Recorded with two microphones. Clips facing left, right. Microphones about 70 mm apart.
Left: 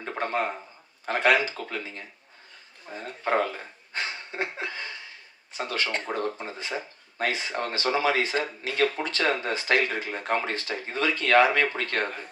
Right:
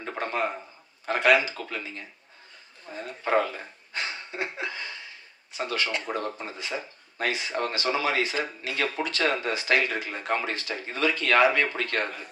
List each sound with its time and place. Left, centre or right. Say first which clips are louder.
1.0 s speech: right 1 dB; left
3.3 s speech: right 1 dB; left